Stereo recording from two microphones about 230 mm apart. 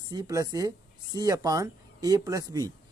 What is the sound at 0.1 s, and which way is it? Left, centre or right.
Speech, centre.